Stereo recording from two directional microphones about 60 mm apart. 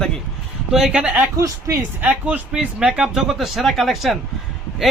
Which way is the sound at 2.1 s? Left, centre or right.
Right.